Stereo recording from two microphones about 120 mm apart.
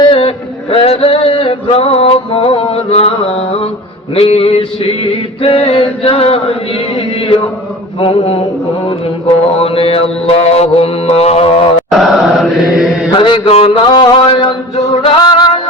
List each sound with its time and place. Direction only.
0.0 s male singing: 50° left (ahead or behind)
4.1 s mantra: 55° left (ahead or behind)
8.0 s mantra: 55° left (ahead or behind)
9.6 s mantra: 55° left (ahead or behind)
11.9 s chant: centre (ahead or behind)
13.1 s mantra: 40° left (ahead or behind)
15.0 s music: 40° left (ahead or behind)